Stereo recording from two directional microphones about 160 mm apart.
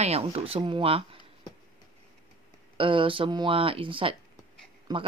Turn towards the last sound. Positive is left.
turn(degrees=-25)  # may be behind; listen again after turning